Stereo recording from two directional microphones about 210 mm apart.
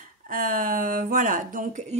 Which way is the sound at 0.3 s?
40° right (ahead or behind).